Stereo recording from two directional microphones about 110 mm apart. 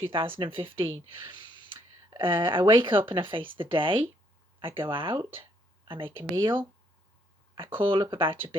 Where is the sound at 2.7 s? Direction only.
50° right (ahead or behind).